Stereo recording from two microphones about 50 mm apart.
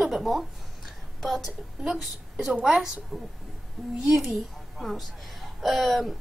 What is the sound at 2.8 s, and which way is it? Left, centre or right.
A woman's voice, centre.